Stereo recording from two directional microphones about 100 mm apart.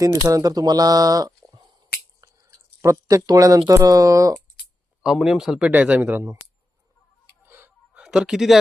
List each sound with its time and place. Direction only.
0.0 s speech: 35° right (ahead or behind)
2.2 s a sound: 30° right (ahead or behind)
3.8 s speech: 35° right (ahead or behind)
5.0 s speech: 5° right (ahead or behind); by 6.2 s 20° right (ahead or behind)
7.4 s music: 20° right (ahead or behind)
7.9 s speech: 5° right (ahead or behind)